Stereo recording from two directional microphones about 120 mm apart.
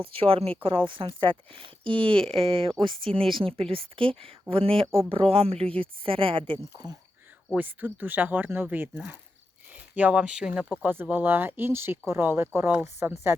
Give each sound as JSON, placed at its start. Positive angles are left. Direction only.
{"t": 0.0, "sound": "speech", "side_deg": -50}
{"t": 7.5, "sound": "speech", "side_deg": -15}